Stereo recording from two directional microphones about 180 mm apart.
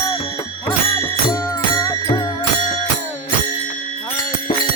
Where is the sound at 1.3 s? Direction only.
20° left (ahead or behind).